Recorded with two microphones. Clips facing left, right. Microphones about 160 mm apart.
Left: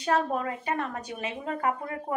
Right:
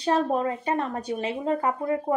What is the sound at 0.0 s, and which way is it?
A woman's voice, 30° right (ahead or behind).